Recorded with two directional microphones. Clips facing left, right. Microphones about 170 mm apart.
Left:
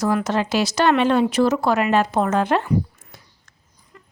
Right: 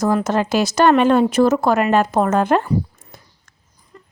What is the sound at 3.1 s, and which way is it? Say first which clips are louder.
Sniff: right 3 dB; 45° right (ahead or behind).